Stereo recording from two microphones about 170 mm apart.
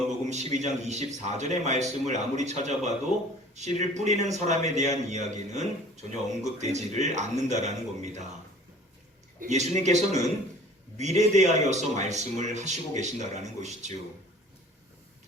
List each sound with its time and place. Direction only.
0.3 s a man's voice: 40° right (ahead or behind)
3.1 s speech: 40° left (ahead or behind)
3.5 s a man's voice: 40° right (ahead or behind)
9.4 s a man's voice: 45° right (ahead or behind)